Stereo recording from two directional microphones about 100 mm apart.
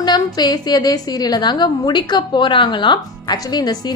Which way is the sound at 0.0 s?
45° left (ahead or behind).